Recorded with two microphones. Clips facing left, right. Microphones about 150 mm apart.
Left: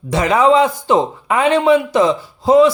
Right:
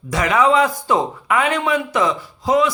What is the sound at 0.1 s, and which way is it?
A man's voice, 30° left (ahead or behind).